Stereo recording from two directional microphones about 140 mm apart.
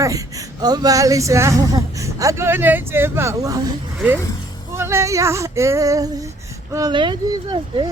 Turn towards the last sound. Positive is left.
turn(degrees=-35)  # may be behind; listen again after turning